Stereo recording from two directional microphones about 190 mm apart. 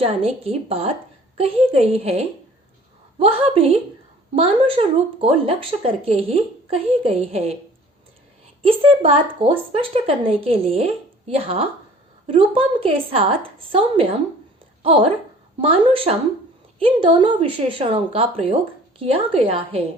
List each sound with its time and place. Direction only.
0.0 s a woman's voice: 30° right (ahead or behind)
9.0 s a woman's voice: 30° right (ahead or behind)